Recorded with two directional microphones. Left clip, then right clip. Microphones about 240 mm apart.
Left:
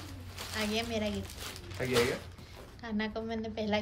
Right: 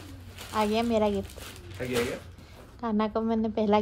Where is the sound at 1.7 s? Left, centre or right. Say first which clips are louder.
Even; centre.